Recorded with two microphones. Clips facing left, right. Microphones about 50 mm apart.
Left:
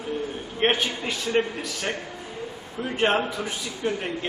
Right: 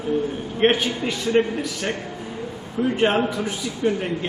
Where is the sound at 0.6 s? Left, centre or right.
Centre.